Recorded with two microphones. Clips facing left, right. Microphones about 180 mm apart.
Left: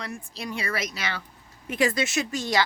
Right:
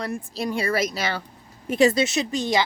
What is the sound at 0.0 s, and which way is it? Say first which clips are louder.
A woman's voice: right 7 dB; 35° right (ahead or behind).